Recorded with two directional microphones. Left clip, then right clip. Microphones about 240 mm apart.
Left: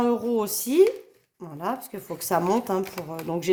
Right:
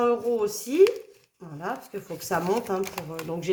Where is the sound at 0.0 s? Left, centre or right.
Left.